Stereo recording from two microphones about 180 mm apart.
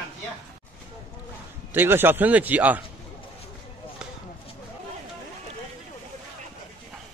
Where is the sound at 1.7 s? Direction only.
10° right (ahead or behind).